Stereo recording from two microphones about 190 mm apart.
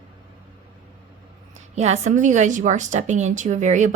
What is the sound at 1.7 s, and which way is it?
A woman's voice, 35° right (ahead or behind).